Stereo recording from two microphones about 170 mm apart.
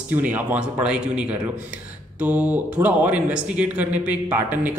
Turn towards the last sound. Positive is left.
turn(degrees=-10)  # may be behind; listen again after turning